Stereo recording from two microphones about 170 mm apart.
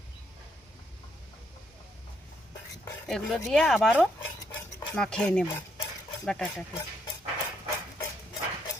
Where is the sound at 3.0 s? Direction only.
Centre (ahead or behind).